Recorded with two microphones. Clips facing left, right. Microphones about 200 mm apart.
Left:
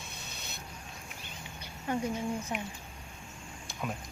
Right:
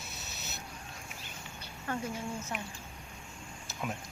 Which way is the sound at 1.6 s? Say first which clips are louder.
Left 4 dB; 15° left (ahead or behind).